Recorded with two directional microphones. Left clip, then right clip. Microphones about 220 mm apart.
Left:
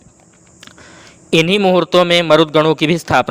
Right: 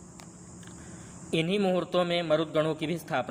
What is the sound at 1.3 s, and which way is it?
A man's voice, 45° left (ahead or behind).